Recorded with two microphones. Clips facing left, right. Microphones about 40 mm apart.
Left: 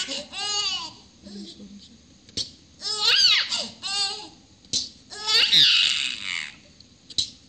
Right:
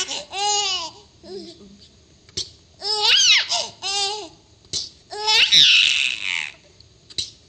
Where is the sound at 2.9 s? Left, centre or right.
Right.